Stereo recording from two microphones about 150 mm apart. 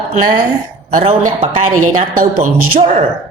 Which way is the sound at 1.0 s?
40° right (ahead or behind).